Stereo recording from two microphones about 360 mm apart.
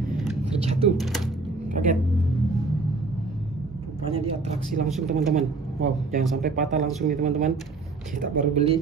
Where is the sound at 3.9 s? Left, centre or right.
Centre.